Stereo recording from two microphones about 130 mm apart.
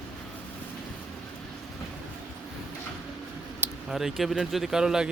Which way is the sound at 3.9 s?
Centre (ahead or behind).